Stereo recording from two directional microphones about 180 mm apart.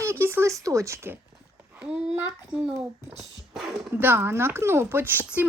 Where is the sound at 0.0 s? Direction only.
15° right (ahead or behind).